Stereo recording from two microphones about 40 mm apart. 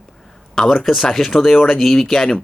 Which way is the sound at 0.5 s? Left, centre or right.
Centre.